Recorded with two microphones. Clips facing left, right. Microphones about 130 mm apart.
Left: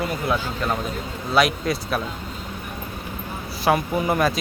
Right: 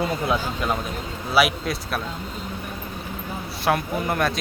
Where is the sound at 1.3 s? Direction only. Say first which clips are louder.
Left 1 dB; centre (ahead or behind).